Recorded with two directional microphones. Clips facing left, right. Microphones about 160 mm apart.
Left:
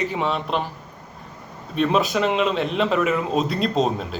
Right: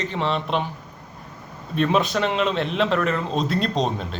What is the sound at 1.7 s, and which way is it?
A man's voice, centre (ahead or behind).